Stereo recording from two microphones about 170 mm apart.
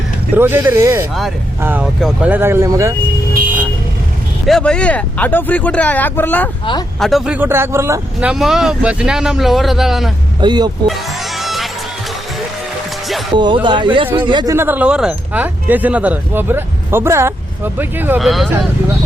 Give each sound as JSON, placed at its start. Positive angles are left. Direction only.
{"t": 0.3, "sound": "speech", "side_deg": -10}
{"t": 2.0, "sound": "speech", "side_deg": 0}
{"t": 2.3, "sound": "speech", "side_deg": -15}
{"t": 4.4, "sound": "speech", "side_deg": 5}
{"t": 7.0, "sound": "speech", "side_deg": 0}
{"t": 8.3, "sound": "speech", "side_deg": 0}
{"t": 10.4, "sound": "a man's voice", "side_deg": -25}
{"t": 11.3, "sound": "music", "side_deg": 0}
{"t": 13.3, "sound": "a man's voice", "side_deg": -25}
{"t": 14.5, "sound": "speech", "side_deg": -15}
{"t": 18.2, "sound": "speech", "side_deg": 0}